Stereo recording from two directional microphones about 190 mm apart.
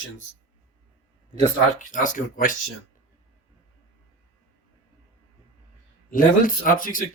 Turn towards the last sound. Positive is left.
turn(degrees=45)  # may be behind; listen again after turning